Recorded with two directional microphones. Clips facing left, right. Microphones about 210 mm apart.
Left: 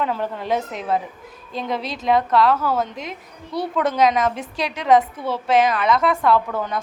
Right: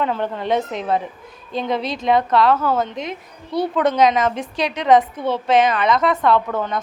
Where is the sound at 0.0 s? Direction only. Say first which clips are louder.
Right 2 dB; 5° left (ahead or behind).